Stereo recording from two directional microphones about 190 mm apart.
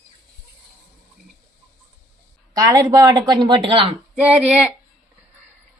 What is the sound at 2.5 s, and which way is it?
Speech, 20° right (ahead or behind).